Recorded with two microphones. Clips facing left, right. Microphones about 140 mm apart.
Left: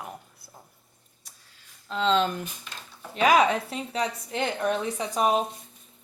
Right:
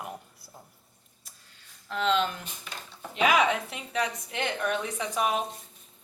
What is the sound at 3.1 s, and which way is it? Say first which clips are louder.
A woman's voice: left 3 dB; 40° left (ahead or behind).